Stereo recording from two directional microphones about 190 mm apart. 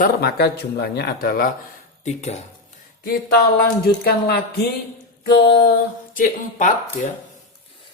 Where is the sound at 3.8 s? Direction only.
55° left (ahead or behind).